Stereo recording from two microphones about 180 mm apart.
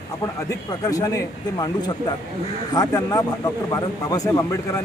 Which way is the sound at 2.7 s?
20° left (ahead or behind).